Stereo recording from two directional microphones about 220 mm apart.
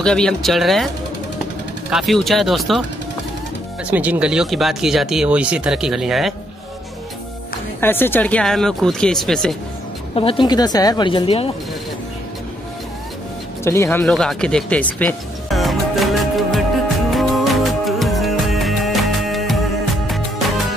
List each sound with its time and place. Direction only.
0.0 s speech: 5° left (ahead or behind)
1.9 s speech: centre (ahead or behind)
3.9 s speech: 5° right (ahead or behind)
7.8 s speech: 10° left (ahead or behind)
10.1 s a woman's voice: 25° left (ahead or behind)
13.7 s music: 10° left (ahead or behind)